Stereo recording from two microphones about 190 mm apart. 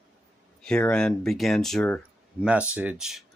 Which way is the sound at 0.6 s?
5° left (ahead or behind).